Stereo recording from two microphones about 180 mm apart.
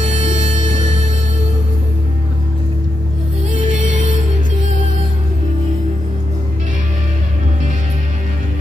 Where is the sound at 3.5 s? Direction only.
45° right (ahead or behind).